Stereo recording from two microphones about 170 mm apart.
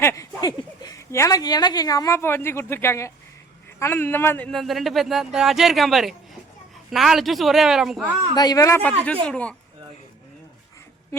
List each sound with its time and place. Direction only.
0.0 s speech: 20° left (ahead or behind); by 8.1 s centre (ahead or behind)
8.4 s a man's voice: 20° left (ahead or behind)
9.2 s speech: 5° left (ahead or behind)